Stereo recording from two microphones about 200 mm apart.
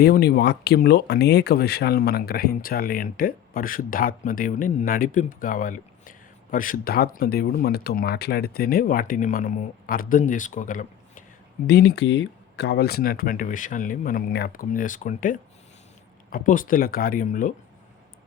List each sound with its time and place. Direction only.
0.0 s speech: 50° left (ahead or behind)
11.6 s speech: 55° left (ahead or behind)